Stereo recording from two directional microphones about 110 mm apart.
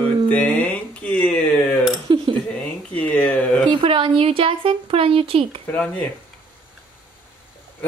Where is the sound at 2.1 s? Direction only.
50° right (ahead or behind).